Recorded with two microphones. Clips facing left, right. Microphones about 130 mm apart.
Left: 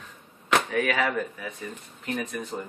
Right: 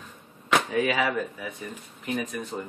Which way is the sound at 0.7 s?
15° right (ahead or behind).